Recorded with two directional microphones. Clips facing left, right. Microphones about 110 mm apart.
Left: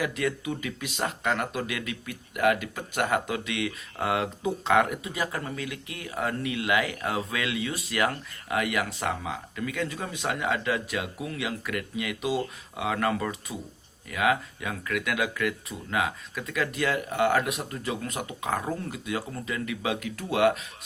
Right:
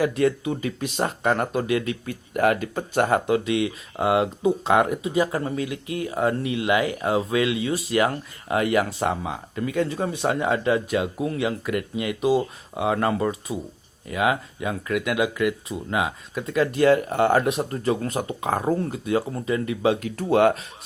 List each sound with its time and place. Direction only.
0.0 s speech: 35° right (ahead or behind)
16.5 s speech: 35° right (ahead or behind)